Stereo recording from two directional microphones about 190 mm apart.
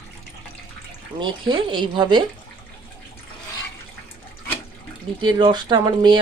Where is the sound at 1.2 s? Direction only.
25° right (ahead or behind).